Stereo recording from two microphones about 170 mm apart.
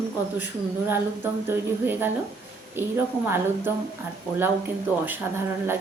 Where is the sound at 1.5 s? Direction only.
10° right (ahead or behind).